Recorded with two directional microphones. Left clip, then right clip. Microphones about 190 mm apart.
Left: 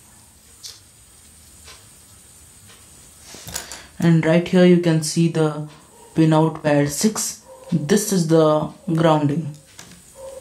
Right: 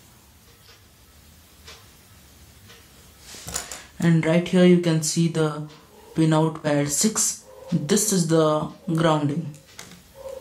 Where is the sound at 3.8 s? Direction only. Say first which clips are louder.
Left 4 dB; 20° left (ahead or behind).